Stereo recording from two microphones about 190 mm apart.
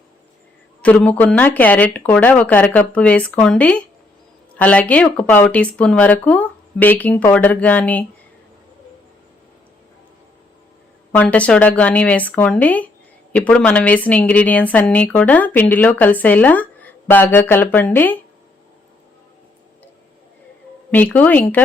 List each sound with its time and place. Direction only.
0.8 s a woman's voice: 5° left (ahead or behind)
11.1 s a woman's voice: 5° left (ahead or behind)
20.9 s a woman's voice: 10° left (ahead or behind)